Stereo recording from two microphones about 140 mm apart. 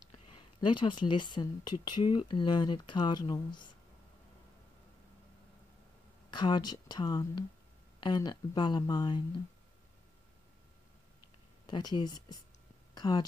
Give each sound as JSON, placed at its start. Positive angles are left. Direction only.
{"t": 0.1, "sound": "speech", "side_deg": 40}
{"t": 6.3, "sound": "speech", "side_deg": 30}
{"t": 11.6, "sound": "speech", "side_deg": 30}
{"t": 12.9, "sound": "a sound", "side_deg": 30}